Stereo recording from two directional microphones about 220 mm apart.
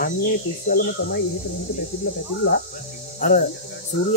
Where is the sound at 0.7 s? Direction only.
45° left (ahead or behind).